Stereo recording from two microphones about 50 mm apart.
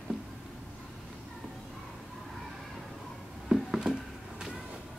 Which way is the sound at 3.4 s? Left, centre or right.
Centre.